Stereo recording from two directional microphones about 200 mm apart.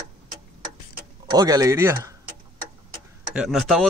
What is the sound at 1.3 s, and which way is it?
Speech, 20° right (ahead or behind).